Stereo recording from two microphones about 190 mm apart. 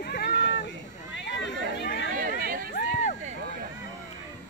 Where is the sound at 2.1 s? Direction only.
50° right (ahead or behind).